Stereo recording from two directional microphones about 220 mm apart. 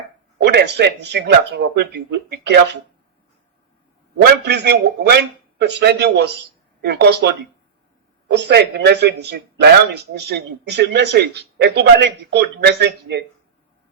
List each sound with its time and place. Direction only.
0.3 s speech: 50° right (ahead or behind)
4.3 s speech: 50° right (ahead or behind)